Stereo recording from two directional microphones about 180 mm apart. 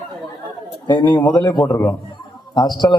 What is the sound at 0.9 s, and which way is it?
A man's voice, 25° left (ahead or behind).